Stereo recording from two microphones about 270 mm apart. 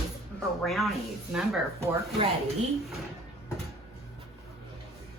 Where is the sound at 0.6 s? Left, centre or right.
Centre.